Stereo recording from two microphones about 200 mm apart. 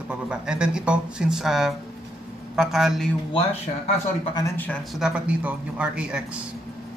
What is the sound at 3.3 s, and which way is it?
Speech, 25° left (ahead or behind).